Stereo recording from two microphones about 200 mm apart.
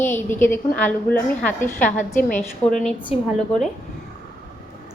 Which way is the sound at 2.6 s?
10° left (ahead or behind).